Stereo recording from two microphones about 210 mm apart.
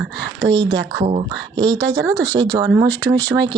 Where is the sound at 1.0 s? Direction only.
30° right (ahead or behind).